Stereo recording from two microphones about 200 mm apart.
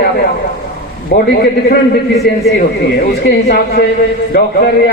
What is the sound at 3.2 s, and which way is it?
A man's voice, 55° left (ahead or behind).